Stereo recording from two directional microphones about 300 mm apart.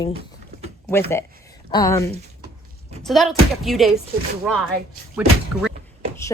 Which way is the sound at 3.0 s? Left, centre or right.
Centre.